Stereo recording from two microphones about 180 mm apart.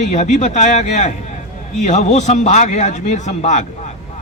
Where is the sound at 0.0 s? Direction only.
40° left (ahead or behind).